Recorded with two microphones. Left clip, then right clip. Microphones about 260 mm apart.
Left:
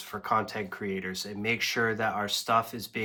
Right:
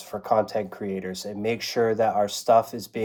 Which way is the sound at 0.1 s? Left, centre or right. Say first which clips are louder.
Right 6 dB; left.